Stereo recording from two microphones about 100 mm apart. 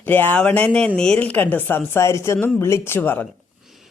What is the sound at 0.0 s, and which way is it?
A man's voice, 15° left (ahead or behind).